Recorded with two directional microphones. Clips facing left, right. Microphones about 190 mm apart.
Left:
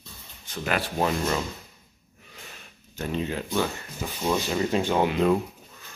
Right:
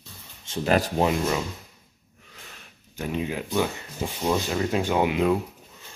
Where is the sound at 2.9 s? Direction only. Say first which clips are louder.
Even; 10° right (ahead or behind).